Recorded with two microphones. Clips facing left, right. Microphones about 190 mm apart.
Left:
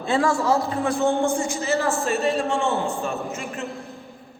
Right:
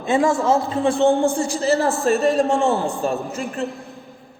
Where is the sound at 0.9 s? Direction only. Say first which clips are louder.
Right 5 dB; 30° right (ahead or behind).